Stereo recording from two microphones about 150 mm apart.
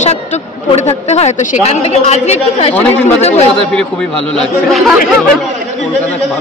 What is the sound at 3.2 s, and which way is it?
Speech, 45° left (ahead or behind).